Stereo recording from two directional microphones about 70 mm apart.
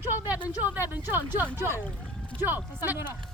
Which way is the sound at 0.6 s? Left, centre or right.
Right.